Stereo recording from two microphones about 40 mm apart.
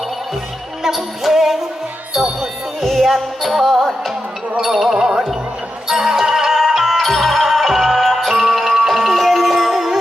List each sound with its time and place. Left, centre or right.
0.8 s music: centre
2.8 s music: centre
4.9 s music: centre
5.9 s music: centre